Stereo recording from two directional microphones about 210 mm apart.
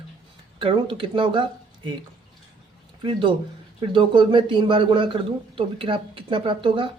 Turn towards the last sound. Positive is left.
turn(degrees=-25)  # may be behind; listen again after turning